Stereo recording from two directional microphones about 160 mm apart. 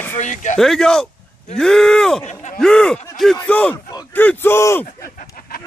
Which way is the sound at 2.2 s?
45° left (ahead or behind).